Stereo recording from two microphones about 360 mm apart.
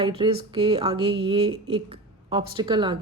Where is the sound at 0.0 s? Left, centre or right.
Centre.